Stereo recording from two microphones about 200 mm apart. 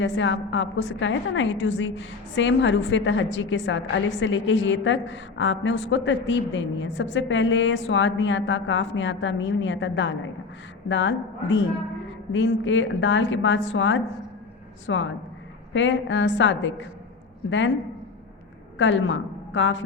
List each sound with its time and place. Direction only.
0.0 s a woman's voice: 70° left (ahead or behind)
18.8 s a woman's voice: 65° left (ahead or behind)